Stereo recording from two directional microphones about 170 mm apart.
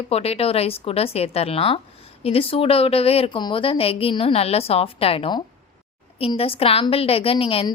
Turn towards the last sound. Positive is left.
turn(degrees=30)  # may be behind; listen again after turning